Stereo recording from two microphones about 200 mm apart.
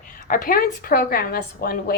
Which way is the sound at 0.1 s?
45° left (ahead or behind).